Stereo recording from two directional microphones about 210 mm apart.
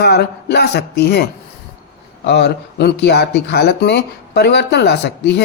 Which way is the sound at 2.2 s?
55° left (ahead or behind).